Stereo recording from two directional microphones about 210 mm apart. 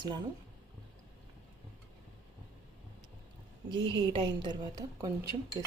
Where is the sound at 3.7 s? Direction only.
20° right (ahead or behind).